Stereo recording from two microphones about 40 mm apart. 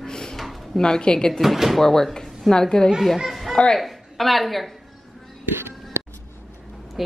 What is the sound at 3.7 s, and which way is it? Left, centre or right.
Speech, centre.